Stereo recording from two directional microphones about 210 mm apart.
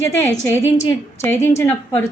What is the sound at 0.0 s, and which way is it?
A woman's voice, 10° left (ahead or behind).